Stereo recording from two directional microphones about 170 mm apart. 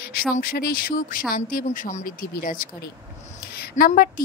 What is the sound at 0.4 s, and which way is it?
A woman's voice, 60° left (ahead or behind).